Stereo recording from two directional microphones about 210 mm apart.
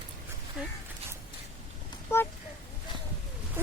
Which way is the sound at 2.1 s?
10° left (ahead or behind).